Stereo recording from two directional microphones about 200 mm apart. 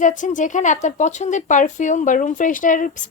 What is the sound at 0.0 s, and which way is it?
A woman's voice, 40° left (ahead or behind).